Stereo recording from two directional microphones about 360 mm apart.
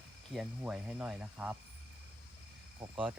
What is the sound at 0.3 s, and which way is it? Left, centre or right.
Speech, centre.